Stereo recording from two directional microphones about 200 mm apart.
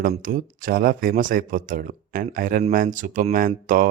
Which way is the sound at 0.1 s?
45° right (ahead or behind).